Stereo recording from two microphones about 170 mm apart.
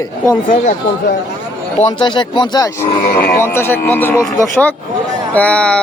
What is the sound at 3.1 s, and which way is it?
Speech, 65° left (ahead or behind).